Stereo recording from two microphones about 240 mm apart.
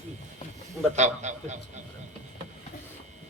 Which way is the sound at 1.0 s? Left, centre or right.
Right.